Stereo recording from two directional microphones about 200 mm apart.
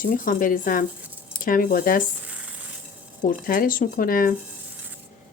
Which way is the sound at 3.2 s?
45° left (ahead or behind).